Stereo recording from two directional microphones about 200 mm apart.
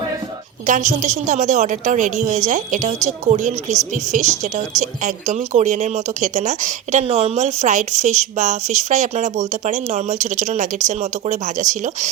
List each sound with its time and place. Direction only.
0.7 s speech: 35° right (ahead or behind)